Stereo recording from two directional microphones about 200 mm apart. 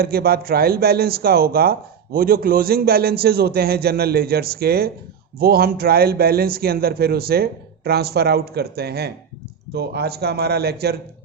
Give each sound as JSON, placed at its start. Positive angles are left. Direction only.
{"t": 0.0, "sound": "a man's voice", "side_deg": -50}